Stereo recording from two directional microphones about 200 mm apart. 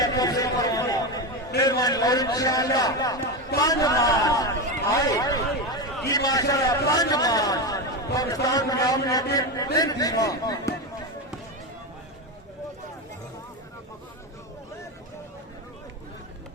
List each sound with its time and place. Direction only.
0.0 s chatter: 20° left (ahead or behind)
1.6 s a man's voice: 20° left (ahead or behind)